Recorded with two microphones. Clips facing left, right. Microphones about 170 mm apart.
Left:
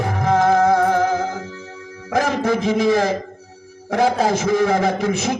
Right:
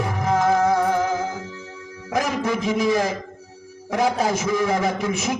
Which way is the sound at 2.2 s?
30° left (ahead or behind).